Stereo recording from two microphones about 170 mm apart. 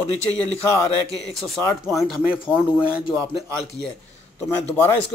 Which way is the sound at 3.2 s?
5° left (ahead or behind).